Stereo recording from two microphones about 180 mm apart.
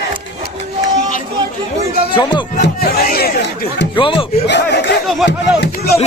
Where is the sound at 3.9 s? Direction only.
30° left (ahead or behind).